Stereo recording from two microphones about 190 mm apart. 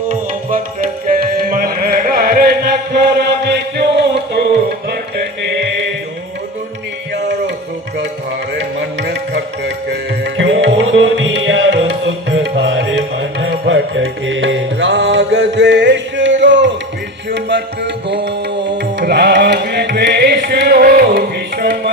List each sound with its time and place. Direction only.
0.1 s music: 45° right (ahead or behind); by 4.4 s 60° right (ahead or behind)
8.8 s music: 65° right (ahead or behind)